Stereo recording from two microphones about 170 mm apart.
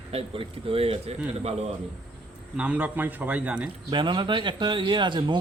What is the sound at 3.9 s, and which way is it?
Speech, 25° right (ahead or behind).